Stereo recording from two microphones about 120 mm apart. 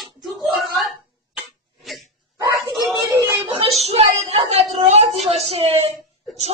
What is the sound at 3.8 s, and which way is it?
A woman's voice, 60° right (ahead or behind).